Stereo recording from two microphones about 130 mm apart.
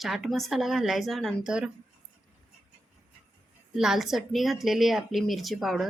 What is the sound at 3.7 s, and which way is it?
A woman's voice, 5° right (ahead or behind).